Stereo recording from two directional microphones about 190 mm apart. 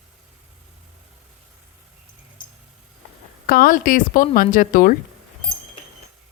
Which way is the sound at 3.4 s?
50° left (ahead or behind).